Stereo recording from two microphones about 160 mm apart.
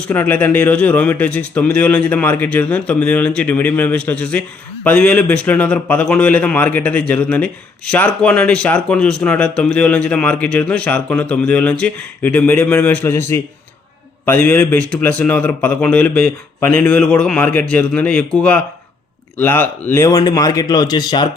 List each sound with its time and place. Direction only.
0.1 s speech: 10° left (ahead or behind)